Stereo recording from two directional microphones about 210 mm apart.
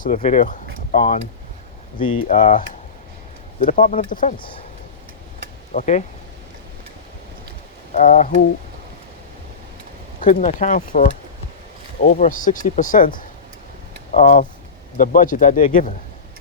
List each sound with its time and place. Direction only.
0.0 s speech: 35° left (ahead or behind)
2.2 s speech: 35° left (ahead or behind)
4.4 s speech: 25° left (ahead or behind)
5.7 s speech: 35° left (ahead or behind)
7.9 s speech: 40° left (ahead or behind)
10.2 s speech: 40° left (ahead or behind)